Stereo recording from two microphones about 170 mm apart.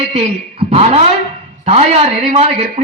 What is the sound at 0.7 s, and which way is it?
A man's voice, 35° right (ahead or behind).